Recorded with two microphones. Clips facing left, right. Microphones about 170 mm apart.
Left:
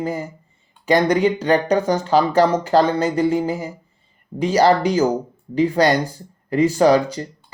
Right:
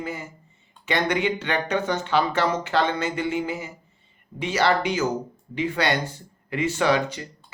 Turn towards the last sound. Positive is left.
turn(degrees=35)  # may be behind; listen again after turning